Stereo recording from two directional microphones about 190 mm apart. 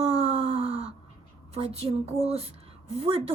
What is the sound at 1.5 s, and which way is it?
Speech, 30° right (ahead or behind).